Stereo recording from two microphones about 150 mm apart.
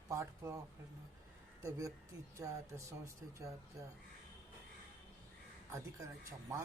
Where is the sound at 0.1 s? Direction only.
20° right (ahead or behind).